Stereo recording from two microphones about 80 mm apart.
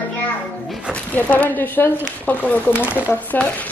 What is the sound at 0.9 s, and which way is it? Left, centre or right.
A woman's voice, centre.